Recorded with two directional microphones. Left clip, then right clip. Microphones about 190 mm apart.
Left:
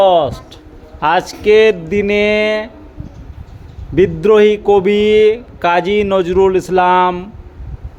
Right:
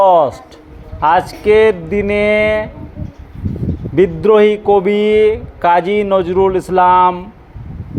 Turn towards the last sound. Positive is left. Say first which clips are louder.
# right 2 dB
turn(degrees=20)  # may be behind; listen again after turning